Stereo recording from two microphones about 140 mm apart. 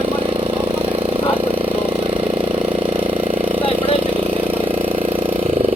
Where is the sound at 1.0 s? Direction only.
45° right (ahead or behind).